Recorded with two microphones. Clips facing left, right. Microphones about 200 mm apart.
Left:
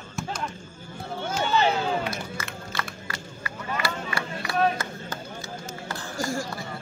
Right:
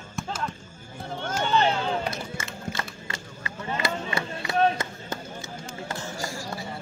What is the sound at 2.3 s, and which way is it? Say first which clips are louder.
Run: right 1 dB; 25° right (ahead or behind).